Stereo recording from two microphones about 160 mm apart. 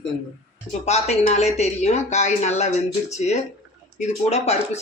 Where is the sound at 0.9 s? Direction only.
45° left (ahead or behind).